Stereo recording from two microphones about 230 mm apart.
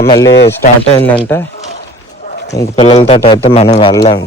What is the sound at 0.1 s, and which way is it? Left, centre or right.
Speech, centre.